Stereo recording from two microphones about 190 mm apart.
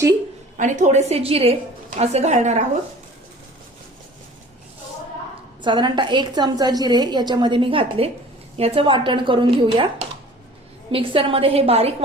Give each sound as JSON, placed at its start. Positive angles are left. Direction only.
{"t": 0.5, "sound": "a woman's voice", "side_deg": -40}
{"t": 5.6, "sound": "a woman's voice", "side_deg": -25}